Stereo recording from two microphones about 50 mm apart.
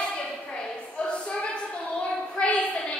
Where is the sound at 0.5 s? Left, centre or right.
Centre.